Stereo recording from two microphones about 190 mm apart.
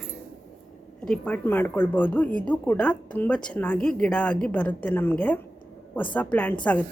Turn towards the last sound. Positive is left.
turn(degrees=5)  # may be behind; listen again after turning